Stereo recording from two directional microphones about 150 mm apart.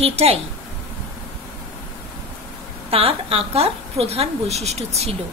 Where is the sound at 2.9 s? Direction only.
40° right (ahead or behind).